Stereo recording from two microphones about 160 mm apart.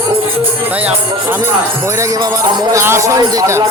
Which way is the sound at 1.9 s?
20° right (ahead or behind).